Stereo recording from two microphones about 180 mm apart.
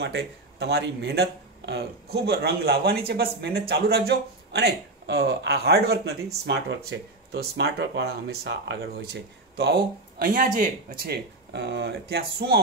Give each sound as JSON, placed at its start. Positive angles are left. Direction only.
{"t": 0.0, "sound": "speech", "side_deg": -75}